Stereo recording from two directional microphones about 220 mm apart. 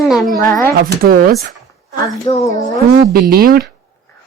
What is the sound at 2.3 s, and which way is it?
Speech, 15° left (ahead or behind).